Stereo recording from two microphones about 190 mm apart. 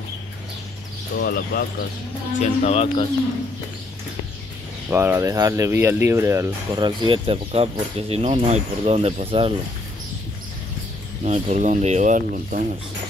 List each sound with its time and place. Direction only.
1.1 s speech: 55° left (ahead or behind)
2.4 s speech: 35° left (ahead or behind)
4.8 s speech: 10° right (ahead or behind); by 9.5 s 30° right (ahead or behind)
11.2 s speech: 35° right (ahead or behind)